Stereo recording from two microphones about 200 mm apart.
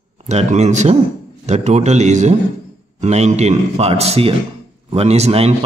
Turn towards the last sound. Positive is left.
turn(degrees=-30)  # may be behind; listen again after turning